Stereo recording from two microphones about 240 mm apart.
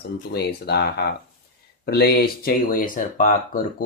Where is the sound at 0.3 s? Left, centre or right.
Left.